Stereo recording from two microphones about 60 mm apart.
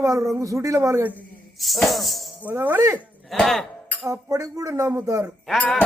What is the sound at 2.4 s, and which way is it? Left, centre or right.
Speech, right.